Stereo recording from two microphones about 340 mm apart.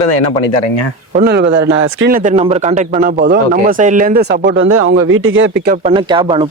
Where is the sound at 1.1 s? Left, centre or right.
Right.